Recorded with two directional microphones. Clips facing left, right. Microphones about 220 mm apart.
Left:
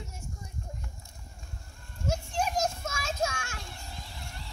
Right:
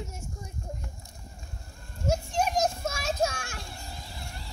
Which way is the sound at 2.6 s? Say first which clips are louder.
Right 4 dB; 35° right (ahead or behind).